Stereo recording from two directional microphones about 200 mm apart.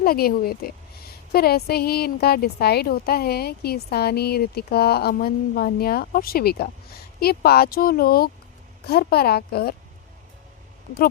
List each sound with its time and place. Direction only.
0.0 s a woman's voice: 50° left (ahead or behind)